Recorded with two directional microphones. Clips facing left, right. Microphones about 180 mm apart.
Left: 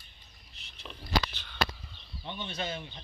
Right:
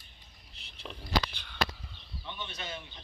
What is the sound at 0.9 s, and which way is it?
Speech, 10° right (ahead or behind).